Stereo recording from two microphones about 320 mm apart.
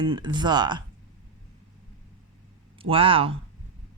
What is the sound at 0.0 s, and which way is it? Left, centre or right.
Speech, centre.